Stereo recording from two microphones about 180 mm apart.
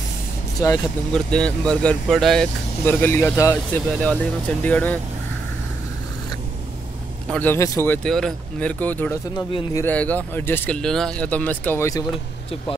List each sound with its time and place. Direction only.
0.6 s speech: 20° left (ahead or behind)
1.1 s speech: 5° left (ahead or behind)
7.3 s speech: 15° left (ahead or behind)